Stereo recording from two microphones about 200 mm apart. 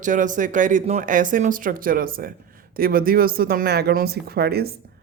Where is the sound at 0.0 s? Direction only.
40° right (ahead or behind).